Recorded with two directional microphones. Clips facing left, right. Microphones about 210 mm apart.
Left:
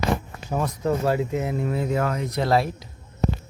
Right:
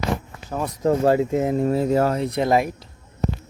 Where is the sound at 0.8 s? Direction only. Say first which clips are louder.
Right 6 dB; 35° right (ahead or behind).